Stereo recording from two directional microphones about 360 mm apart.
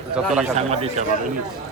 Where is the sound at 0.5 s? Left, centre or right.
Centre.